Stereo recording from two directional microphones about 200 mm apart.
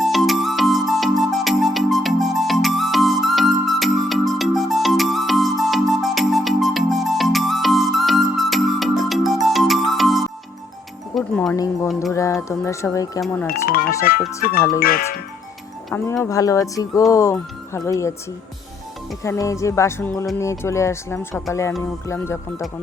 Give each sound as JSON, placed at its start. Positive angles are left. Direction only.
{"t": 0.0, "sound": "music", "side_deg": 0}
{"t": 11.5, "sound": "speech", "side_deg": 15}
{"t": 13.5, "sound": "speech", "side_deg": 45}
{"t": 16.2, "sound": "speech", "side_deg": 15}
{"t": 19.2, "sound": "speech", "side_deg": 15}